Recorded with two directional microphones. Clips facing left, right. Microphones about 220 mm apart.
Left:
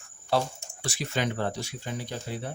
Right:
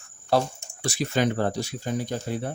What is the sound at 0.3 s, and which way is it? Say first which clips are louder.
Speech: right 4 dB; 40° right (ahead or behind).